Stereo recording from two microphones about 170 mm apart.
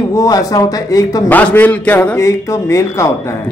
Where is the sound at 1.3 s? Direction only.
10° left (ahead or behind).